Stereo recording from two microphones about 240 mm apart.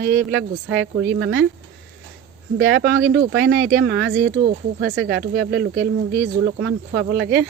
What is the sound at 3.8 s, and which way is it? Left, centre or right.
Speech, right.